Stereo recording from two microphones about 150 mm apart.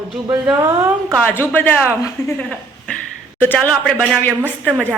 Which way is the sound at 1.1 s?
15° left (ahead or behind).